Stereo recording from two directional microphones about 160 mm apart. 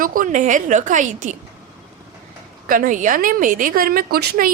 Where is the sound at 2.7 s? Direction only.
55° right (ahead or behind); by 4.5 s 70° right (ahead or behind).